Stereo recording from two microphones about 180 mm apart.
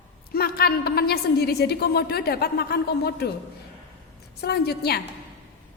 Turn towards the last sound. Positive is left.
turn(degrees=60)  # may be behind; listen again after turning